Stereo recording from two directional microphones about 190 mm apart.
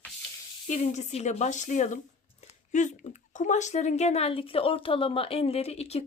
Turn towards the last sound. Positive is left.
turn(degrees=35)  # may be behind; listen again after turning